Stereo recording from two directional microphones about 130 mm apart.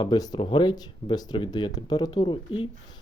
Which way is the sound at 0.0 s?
30° left (ahead or behind).